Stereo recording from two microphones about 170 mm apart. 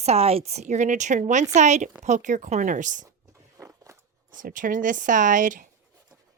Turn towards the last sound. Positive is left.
turn(degrees=-50)  # may be behind; listen again after turning